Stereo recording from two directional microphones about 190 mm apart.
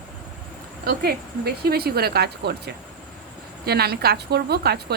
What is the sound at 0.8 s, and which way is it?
A woman's voice, 55° right (ahead or behind).